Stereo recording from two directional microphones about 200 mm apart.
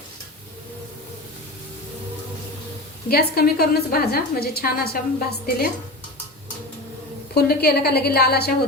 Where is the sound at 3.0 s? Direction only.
50° left (ahead or behind).